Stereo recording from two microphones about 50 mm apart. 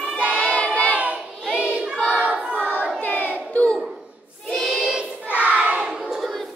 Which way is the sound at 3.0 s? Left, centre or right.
Left.